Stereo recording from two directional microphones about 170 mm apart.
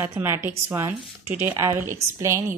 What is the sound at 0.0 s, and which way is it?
A woman's voice, 15° right (ahead or behind).